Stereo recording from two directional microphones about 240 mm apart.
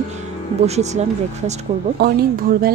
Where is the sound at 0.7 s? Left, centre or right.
Right.